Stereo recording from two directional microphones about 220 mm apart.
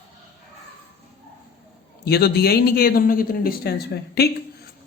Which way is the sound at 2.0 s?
45° left (ahead or behind).